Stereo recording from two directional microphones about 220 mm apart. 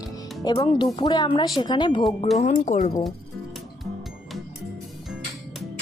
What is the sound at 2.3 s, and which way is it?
Speech, 30° left (ahead or behind).